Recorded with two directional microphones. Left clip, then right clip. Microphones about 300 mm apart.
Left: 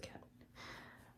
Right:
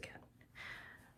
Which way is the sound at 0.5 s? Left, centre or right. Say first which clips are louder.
Right 3 dB; centre.